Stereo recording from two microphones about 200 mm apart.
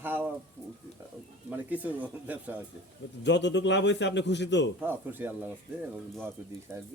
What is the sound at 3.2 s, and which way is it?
A man's voice, 60° left (ahead or behind).